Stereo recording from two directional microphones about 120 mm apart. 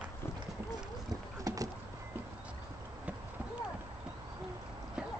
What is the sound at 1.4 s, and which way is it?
Rowboat, 30° right (ahead or behind).